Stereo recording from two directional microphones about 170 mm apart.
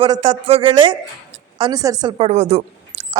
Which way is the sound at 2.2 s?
45° right (ahead or behind).